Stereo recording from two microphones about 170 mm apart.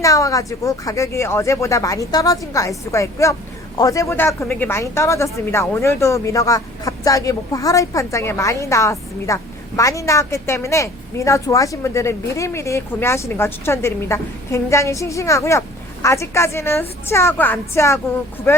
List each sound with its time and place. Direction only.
0.0 s speech: 20° left (ahead or behind)